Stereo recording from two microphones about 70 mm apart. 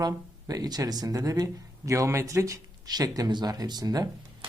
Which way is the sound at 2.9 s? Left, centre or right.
Right.